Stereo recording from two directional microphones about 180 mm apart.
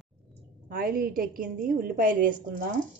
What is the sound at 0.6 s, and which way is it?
A woman's voice, 55° right (ahead or behind).